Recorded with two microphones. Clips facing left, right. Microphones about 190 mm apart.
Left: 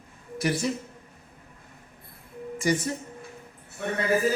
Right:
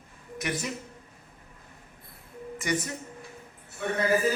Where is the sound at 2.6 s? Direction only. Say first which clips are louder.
Left 5 dB; 30° left (ahead or behind).